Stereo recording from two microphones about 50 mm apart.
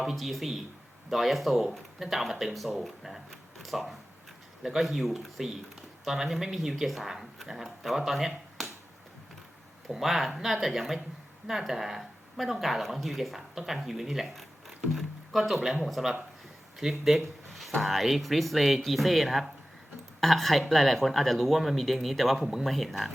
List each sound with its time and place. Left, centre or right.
0.0 s speech: centre
9.9 s speech: centre